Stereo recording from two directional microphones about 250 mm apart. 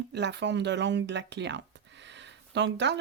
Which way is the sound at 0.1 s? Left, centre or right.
Right.